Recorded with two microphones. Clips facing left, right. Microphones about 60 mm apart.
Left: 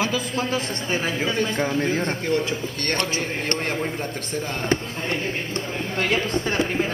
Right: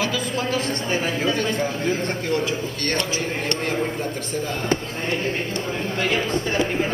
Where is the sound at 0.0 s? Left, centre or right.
Left.